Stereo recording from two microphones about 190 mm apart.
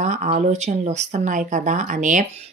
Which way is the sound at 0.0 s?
40° right (ahead or behind).